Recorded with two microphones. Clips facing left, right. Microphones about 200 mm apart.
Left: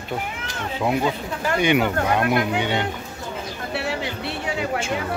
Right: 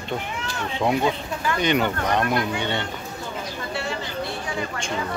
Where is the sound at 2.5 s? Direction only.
10° left (ahead or behind).